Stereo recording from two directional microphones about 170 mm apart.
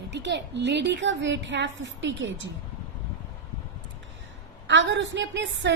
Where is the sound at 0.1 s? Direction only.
90° right.